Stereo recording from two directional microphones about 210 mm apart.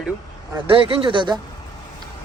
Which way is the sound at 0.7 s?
25° right (ahead or behind).